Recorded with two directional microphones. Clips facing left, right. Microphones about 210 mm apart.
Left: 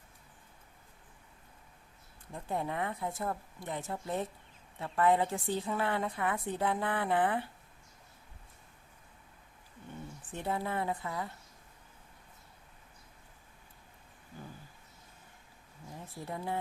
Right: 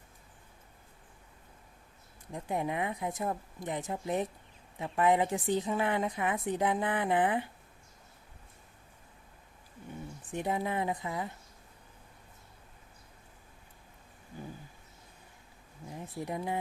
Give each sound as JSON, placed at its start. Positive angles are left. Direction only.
{"t": 2.3, "sound": "a woman's voice", "side_deg": -15}
{"t": 10.3, "sound": "a woman's voice", "side_deg": -15}
{"t": 15.9, "sound": "speech", "side_deg": -15}